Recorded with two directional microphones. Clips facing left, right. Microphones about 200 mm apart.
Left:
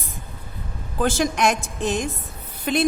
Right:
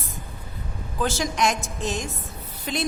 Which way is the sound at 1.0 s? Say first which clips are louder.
Left 4 dB; 55° left (ahead or behind).